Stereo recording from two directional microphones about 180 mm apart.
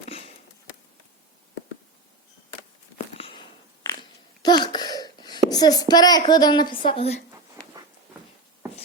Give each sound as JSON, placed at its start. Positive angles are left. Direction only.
{"t": 0.1, "sound": "sniff", "side_deg": 30}
{"t": 3.2, "sound": "a sound", "side_deg": 30}
{"t": 4.4, "sound": "speech", "side_deg": 25}